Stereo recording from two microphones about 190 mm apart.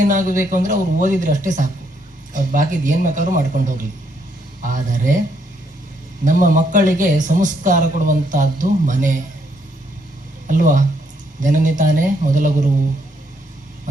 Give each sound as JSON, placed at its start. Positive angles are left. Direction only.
{"t": 0.0, "sound": "a man's voice", "side_deg": -45}
{"t": 6.2, "sound": "a man's voice", "side_deg": -45}
{"t": 10.4, "sound": "a man's voice", "side_deg": -45}